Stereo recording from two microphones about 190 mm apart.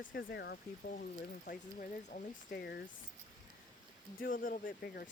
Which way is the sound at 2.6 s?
60° left (ahead or behind).